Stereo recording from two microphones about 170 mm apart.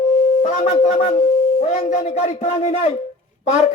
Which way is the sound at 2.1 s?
40° left (ahead or behind).